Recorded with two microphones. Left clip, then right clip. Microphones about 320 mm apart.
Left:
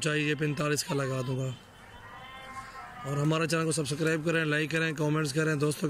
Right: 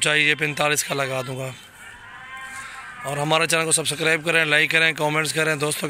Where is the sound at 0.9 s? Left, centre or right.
Right.